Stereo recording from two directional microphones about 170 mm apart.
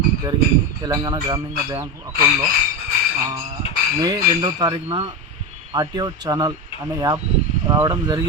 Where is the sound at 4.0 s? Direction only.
25° right (ahead or behind).